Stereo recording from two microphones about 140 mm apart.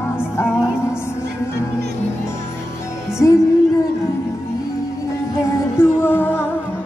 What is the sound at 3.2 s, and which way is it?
Music, 20° left (ahead or behind).